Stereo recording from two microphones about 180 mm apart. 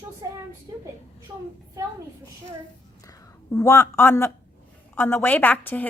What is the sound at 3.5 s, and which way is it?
A woman's voice, 15° left (ahead or behind).